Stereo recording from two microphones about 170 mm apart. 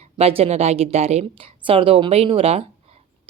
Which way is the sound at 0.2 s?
35° right (ahead or behind).